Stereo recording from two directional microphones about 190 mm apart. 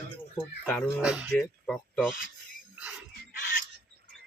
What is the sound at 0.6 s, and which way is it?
Speech, centre (ahead or behind).